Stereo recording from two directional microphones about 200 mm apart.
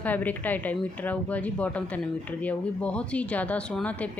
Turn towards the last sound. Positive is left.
turn(degrees=5)  # may be behind; listen again after turning